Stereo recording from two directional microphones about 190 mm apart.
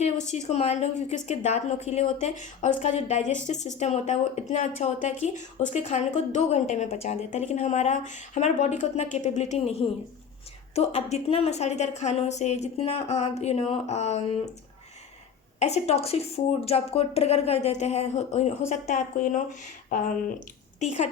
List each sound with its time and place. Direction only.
0.0 s a woman's voice: 35° left (ahead or behind)
10.8 s a woman's voice: 35° left (ahead or behind)
15.5 s a woman's voice: 35° left (ahead or behind)